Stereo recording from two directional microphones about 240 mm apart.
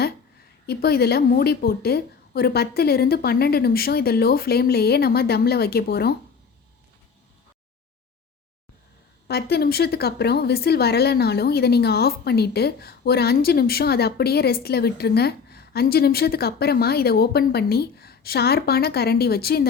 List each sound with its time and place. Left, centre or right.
0.7 s speech: left
9.2 s speech: left